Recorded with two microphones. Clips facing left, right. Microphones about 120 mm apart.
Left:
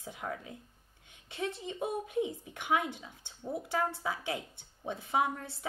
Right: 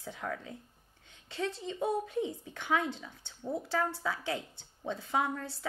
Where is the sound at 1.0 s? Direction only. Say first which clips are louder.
Right 1 dB; 20° left (ahead or behind).